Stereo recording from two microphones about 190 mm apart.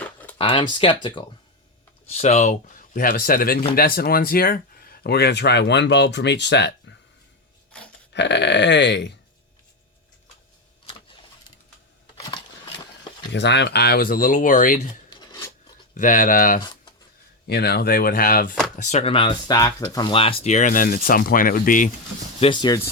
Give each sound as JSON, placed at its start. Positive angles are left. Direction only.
{"t": 0.0, "sound": "a sound", "side_deg": 10}
{"t": 0.3, "sound": "speech", "side_deg": 25}
{"t": 2.0, "sound": "speech", "side_deg": 35}
{"t": 8.1, "sound": "speech", "side_deg": 65}
{"t": 12.2, "sound": "a sound", "side_deg": 25}
{"t": 13.3, "sound": "speech", "side_deg": 65}
{"t": 15.1, "sound": "filing", "side_deg": 20}
{"t": 16.0, "sound": "speech", "side_deg": 45}
{"t": 17.5, "sound": "speech", "side_deg": 55}
{"t": 18.8, "sound": "speech", "side_deg": 40}
{"t": 22.4, "sound": "speech", "side_deg": 25}